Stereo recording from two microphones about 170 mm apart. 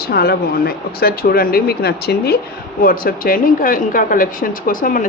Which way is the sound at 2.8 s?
60° left (ahead or behind).